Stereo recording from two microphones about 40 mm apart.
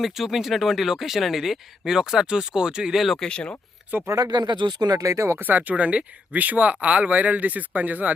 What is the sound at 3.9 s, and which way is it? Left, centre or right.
Speech, right.